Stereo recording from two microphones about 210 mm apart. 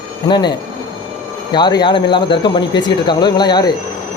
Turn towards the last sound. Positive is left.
turn(degrees=20)  # may be behind; listen again after turning